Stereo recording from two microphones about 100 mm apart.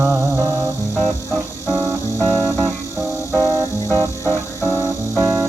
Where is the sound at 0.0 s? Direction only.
25° right (ahead or behind).